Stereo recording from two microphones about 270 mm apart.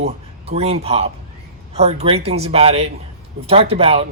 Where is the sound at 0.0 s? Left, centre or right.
Right.